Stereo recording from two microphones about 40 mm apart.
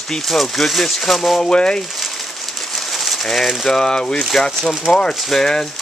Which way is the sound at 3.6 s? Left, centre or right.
Centre.